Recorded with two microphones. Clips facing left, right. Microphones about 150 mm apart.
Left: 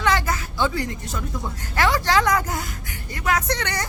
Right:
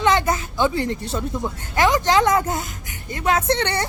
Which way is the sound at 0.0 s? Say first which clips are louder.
Right 4 dB; 20° right (ahead or behind).